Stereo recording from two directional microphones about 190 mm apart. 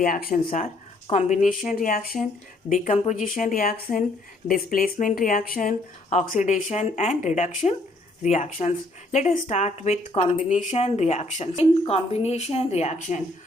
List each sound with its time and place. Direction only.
0.0 s speech: 45° left (ahead or behind)